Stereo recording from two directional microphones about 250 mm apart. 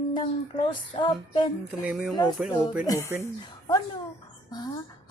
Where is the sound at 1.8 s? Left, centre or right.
Centre.